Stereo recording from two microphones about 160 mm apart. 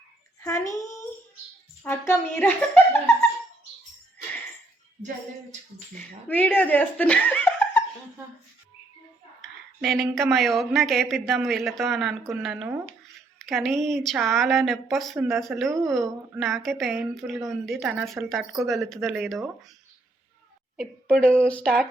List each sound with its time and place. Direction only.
0.4 s a child's voice: 20° left (ahead or behind)
6.2 s speech: 10° left (ahead or behind)
9.4 s speech: centre (ahead or behind)
20.7 s a woman's voice: 5° left (ahead or behind)